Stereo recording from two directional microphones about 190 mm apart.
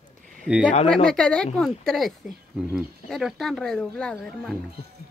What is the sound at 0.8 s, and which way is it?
Speech, 5° left (ahead or behind).